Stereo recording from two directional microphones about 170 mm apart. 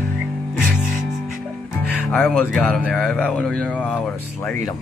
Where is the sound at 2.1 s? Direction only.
5° left (ahead or behind).